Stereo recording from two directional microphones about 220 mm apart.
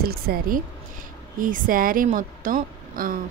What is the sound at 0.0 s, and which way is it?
A woman's voice, 45° right (ahead or behind).